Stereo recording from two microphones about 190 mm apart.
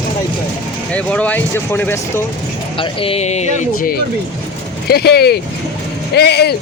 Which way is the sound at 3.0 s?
30° left (ahead or behind).